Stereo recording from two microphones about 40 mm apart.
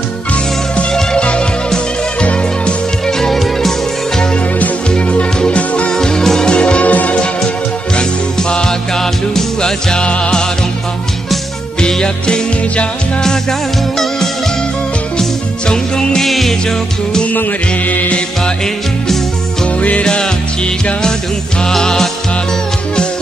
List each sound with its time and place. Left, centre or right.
1.1 s music: left
3.2 s music: centre
4.9 s music: left
5.9 s music: centre
6.5 s music: left
7.9 s music: left
11.9 s music: left
15.7 s music: centre
16.3 s music: centre
17.8 s music: left
19.8 s music: left
21.6 s music: centre